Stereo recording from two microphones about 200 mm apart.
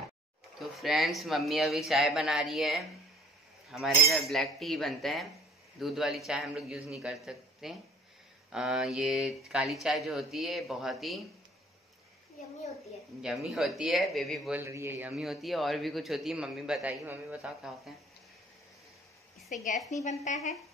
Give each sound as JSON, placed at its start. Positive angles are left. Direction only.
{"t": 0.6, "sound": "speech", "side_deg": 0}
{"t": 13.2, "sound": "speech", "side_deg": 0}
{"t": 14.6, "sound": "speech", "side_deg": -15}
{"t": 19.5, "sound": "a woman's voice", "side_deg": 40}